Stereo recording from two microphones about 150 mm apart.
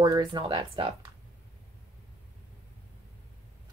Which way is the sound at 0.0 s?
30° right (ahead or behind).